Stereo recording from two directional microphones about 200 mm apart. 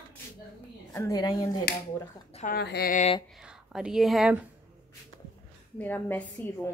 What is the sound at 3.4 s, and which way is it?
Speech, 5° right (ahead or behind).